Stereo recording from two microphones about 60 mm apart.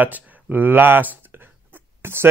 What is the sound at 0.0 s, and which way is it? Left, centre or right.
Speech, right.